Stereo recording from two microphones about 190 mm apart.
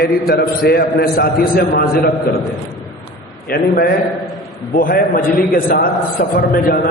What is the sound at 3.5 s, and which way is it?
A man's voice, 55° left (ahead or behind).